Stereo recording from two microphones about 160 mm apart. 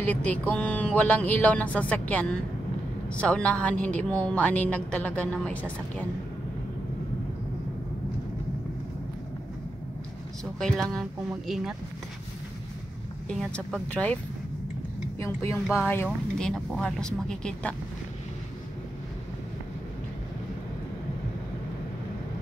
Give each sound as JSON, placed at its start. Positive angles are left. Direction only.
{"t": 0.0, "sound": "a woman's voice", "side_deg": 10}
{"t": 10.4, "sound": "speech", "side_deg": 5}
{"t": 13.3, "sound": "a woman's voice", "side_deg": 5}
{"t": 15.1, "sound": "a woman's voice", "side_deg": 15}
{"t": 15.6, "sound": "speech", "side_deg": -5}
{"t": 15.9, "sound": "a woman's voice", "side_deg": 15}
{"t": 16.4, "sound": "speech", "side_deg": 5}